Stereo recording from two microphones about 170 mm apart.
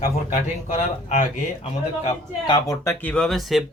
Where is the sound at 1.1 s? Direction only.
40° left (ahead or behind).